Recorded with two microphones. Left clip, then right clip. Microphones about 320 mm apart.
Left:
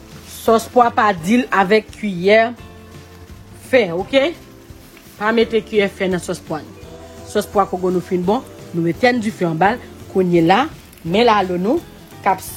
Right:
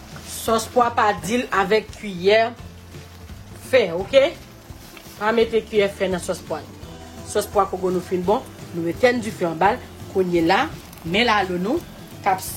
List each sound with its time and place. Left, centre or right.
0.4 s a woman's voice: centre
3.7 s a woman's voice: left